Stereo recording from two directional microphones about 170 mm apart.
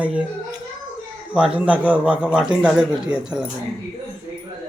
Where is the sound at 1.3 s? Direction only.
5° right (ahead or behind).